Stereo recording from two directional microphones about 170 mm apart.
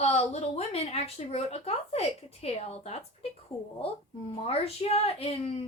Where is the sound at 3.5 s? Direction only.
Centre (ahead or behind).